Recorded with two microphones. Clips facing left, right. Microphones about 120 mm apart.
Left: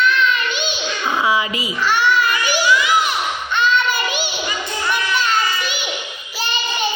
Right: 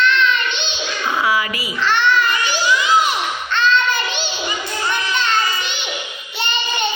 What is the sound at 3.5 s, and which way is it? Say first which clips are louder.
Child singing: right 1 dB; 10° left (ahead or behind).